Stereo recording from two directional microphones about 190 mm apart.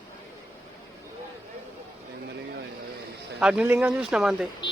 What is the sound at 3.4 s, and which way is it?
Speech, 5° right (ahead or behind).